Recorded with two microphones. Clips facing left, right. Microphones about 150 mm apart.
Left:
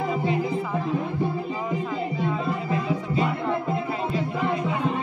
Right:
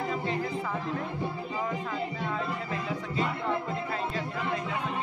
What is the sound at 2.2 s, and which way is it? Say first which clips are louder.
Music: left 6 dB; 15° left (ahead or behind).